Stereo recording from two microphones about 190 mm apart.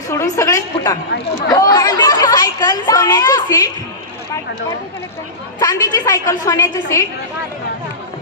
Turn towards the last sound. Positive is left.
turn(degrees=15)  # may be behind; listen again after turning